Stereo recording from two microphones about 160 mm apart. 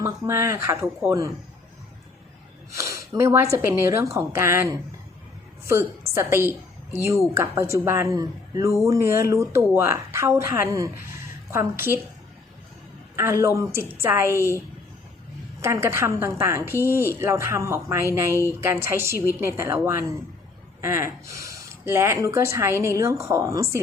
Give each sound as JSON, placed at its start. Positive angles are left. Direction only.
{"t": 0.0, "sound": "speech", "side_deg": -15}
{"t": 2.7, "sound": "speech", "side_deg": -15}
{"t": 13.1, "sound": "speech", "side_deg": -15}
{"t": 15.6, "sound": "speech", "side_deg": -15}